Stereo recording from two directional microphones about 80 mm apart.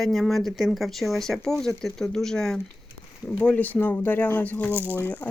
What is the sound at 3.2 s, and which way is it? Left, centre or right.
Speech, centre.